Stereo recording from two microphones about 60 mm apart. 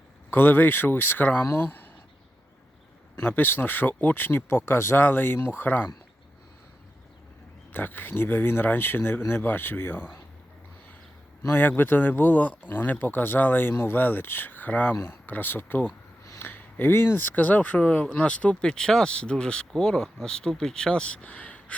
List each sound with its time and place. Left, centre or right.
0.3 s speech: left
3.2 s speech: left
7.7 s speech: left
11.8 s speech: left
16.4 s a sound: left
16.9 s speech: left